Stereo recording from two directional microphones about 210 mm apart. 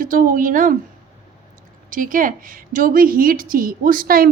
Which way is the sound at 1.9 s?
40° right (ahead or behind).